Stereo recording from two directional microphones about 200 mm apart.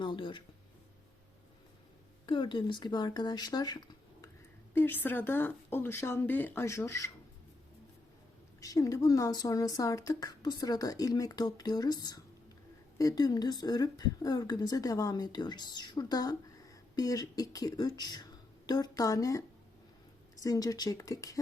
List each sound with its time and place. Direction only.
0.0 s speech: 25° left (ahead or behind)
2.2 s speech: 25° left (ahead or behind)
8.6 s a woman's voice: 20° left (ahead or behind)
13.0 s a woman's voice: 20° left (ahead or behind)